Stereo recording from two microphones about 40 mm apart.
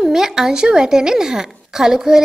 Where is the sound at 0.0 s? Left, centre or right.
Centre.